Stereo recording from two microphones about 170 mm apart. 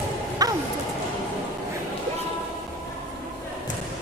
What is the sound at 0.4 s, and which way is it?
Music, 20° right (ahead or behind).